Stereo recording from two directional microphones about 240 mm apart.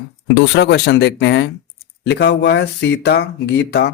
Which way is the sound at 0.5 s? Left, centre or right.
Left.